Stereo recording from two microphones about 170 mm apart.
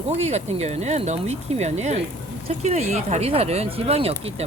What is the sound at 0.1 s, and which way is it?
Speech, 40° right (ahead or behind).